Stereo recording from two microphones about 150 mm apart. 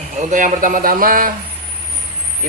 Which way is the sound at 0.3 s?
60° right (ahead or behind).